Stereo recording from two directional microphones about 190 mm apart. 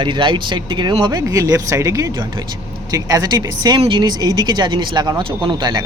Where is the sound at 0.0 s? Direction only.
25° right (ahead or behind).